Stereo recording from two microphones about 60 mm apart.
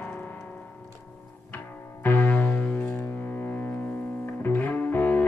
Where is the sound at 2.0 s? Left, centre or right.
Left.